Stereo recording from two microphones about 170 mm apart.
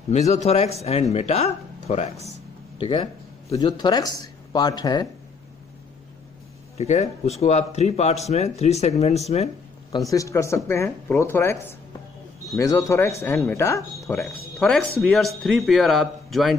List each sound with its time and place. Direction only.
0.1 s speech: 40° left (ahead or behind); by 5.0 s 25° left (ahead or behind)
6.8 s speech: 40° left (ahead or behind)
9.9 s speech: 20° left (ahead or behind)
14.6 s speech: 5° left (ahead or behind)